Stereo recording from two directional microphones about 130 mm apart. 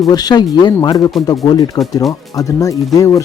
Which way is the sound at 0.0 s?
30° left (ahead or behind).